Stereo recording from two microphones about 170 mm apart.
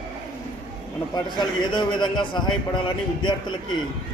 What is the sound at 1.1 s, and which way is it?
A man's voice, 25° left (ahead or behind).